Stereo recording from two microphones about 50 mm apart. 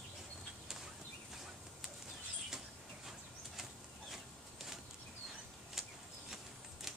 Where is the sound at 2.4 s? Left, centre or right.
Centre.